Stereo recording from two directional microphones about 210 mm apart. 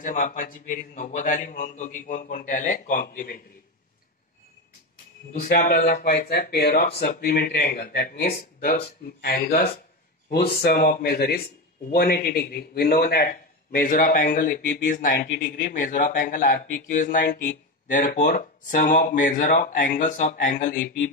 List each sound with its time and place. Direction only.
0.0 s a man's voice: 40° left (ahead or behind)
5.4 s a man's voice: 45° left (ahead or behind)